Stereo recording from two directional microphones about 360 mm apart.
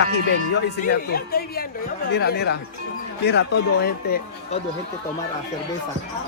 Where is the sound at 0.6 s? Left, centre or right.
Left.